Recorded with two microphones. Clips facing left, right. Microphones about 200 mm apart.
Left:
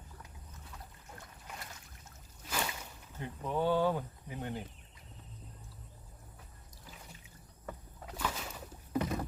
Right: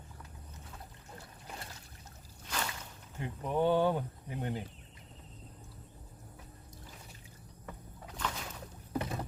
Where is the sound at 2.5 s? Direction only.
10° left (ahead or behind).